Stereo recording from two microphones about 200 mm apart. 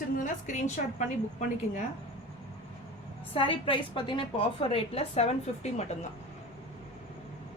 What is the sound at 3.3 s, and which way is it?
A woman's voice, 25° left (ahead or behind).